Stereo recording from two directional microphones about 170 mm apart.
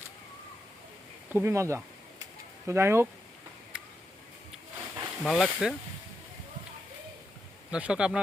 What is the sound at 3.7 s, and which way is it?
Tick-tock, 5° right (ahead or behind).